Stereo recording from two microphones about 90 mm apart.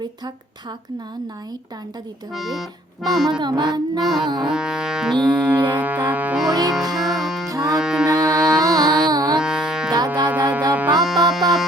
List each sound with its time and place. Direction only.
2.3 s accordion: centre (ahead or behind)
3.2 s music: 50° right (ahead or behind)
4.0 s accordion: centre (ahead or behind)
4.4 s music: 5° right (ahead or behind)
6.5 s music: 45° right (ahead or behind)
6.9 s music: centre (ahead or behind)
7.4 s music: 40° right (ahead or behind)
7.7 s cattle: 5° right (ahead or behind)
8.6 s music: 45° right (ahead or behind)
9.0 s carnatic music: 50° right (ahead or behind)
9.4 s music: 5° right (ahead or behind)
10.2 s music: 20° right (ahead or behind)
11.0 s music: centre (ahead or behind)